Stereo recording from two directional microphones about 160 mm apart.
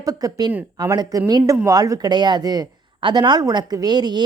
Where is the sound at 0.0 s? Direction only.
20° right (ahead or behind).